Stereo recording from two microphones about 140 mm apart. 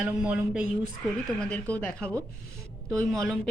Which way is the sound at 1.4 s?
10° left (ahead or behind).